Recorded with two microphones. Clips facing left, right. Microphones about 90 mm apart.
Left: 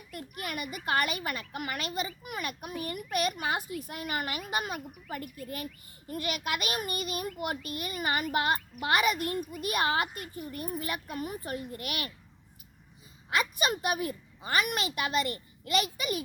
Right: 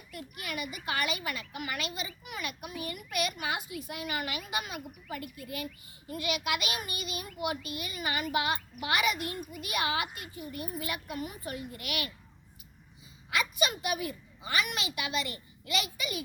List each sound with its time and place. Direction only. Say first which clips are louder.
0.1 s a child's voice: left 2 dB; 45° left (ahead or behind)
13.3 s a child's voice: left 2 dB; 40° left (ahead or behind)